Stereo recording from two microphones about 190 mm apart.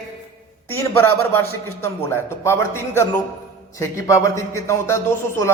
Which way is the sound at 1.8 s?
15° left (ahead or behind).